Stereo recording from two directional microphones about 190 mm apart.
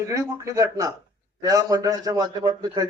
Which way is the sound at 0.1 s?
15° right (ahead or behind).